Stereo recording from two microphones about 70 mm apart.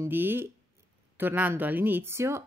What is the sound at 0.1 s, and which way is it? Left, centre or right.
Speech, right.